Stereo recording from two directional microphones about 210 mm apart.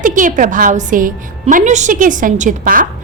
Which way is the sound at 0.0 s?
40° right (ahead or behind).